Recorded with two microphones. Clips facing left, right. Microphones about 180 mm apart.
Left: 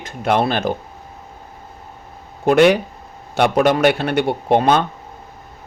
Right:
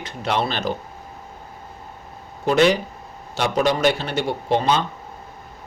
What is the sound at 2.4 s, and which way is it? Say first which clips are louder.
A man's voice: left 4 dB; 55° left (ahead or behind).